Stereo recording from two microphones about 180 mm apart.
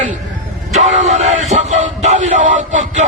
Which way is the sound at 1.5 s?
40° right (ahead or behind).